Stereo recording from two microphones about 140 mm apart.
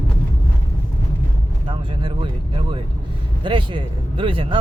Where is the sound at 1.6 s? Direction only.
35° right (ahead or behind).